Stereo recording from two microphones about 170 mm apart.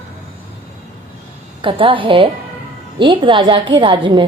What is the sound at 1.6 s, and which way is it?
A woman's voice, 30° right (ahead or behind).